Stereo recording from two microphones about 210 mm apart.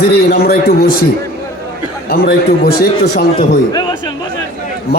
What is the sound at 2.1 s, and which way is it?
Speech, 50° left (ahead or behind).